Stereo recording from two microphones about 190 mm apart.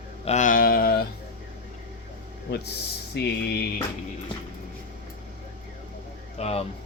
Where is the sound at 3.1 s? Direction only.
60° left (ahead or behind).